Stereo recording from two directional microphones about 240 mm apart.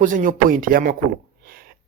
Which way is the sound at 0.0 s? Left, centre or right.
Right.